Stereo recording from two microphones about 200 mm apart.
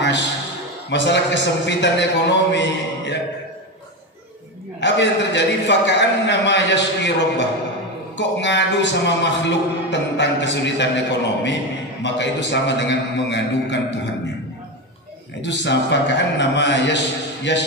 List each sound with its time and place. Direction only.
0.8 s a man's voice: 60° left (ahead or behind)
4.7 s a man's voice: 60° left (ahead or behind)
15.4 s a man's voice: 60° left (ahead or behind)